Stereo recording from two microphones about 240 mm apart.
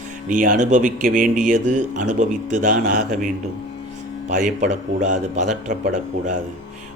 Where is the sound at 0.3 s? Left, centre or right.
Right.